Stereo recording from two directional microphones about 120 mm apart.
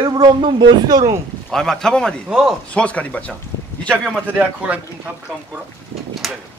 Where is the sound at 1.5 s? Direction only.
5° left (ahead or behind).